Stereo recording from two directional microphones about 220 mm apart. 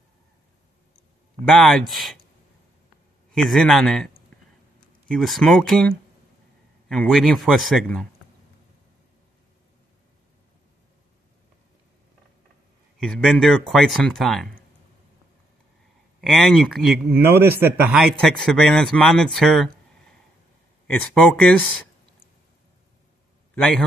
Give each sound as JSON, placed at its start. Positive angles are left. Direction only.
{"t": 1.4, "sound": "speech", "side_deg": 0}
{"t": 3.3, "sound": "speech", "side_deg": 0}
{"t": 13.0, "sound": "speech", "side_deg": 0}
{"t": 16.2, "sound": "speech", "side_deg": 0}
{"t": 23.5, "sound": "a man's voice", "side_deg": 5}